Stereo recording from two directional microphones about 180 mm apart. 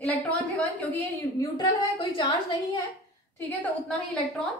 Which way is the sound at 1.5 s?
25° left (ahead or behind).